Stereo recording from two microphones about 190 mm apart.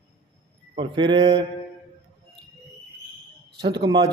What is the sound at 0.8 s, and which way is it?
Speech, 25° right (ahead or behind).